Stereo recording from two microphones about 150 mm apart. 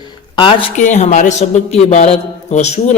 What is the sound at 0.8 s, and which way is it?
A man's voice, 55° left (ahead or behind).